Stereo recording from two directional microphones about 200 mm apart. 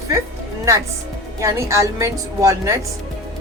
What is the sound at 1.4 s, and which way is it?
Speech, 15° right (ahead or behind).